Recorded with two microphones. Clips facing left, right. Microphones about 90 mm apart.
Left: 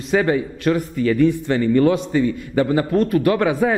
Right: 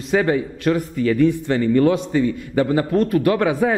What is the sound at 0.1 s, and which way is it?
Speech, 15° left (ahead or behind).